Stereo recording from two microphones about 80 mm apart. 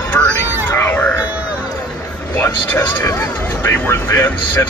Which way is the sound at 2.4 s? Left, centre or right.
Left.